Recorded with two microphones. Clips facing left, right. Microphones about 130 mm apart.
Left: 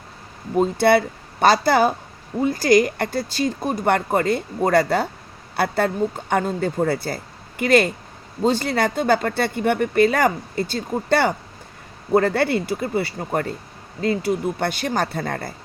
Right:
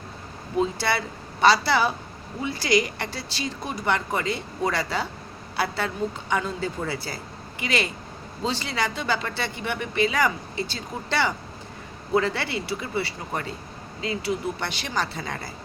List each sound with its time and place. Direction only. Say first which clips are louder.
0.5 s speech: left 8 dB; 50° left (ahead or behind)